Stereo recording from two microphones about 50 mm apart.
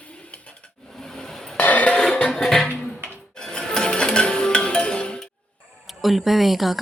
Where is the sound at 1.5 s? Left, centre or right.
Left.